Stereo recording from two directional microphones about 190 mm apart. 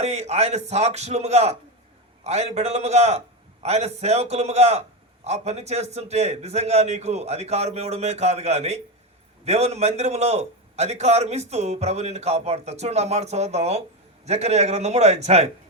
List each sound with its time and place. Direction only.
0.0 s a man's voice: 35° right (ahead or behind)